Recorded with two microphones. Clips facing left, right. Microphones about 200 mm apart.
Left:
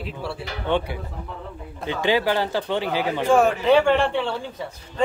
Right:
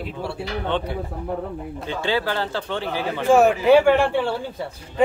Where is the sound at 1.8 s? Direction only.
15° left (ahead or behind).